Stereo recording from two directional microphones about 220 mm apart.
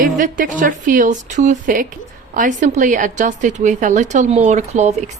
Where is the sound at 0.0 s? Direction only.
35° right (ahead or behind).